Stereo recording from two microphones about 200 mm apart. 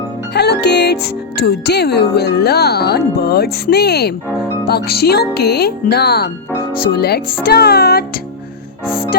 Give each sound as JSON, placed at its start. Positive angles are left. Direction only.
{"t": 0.3, "sound": "speech", "side_deg": 55}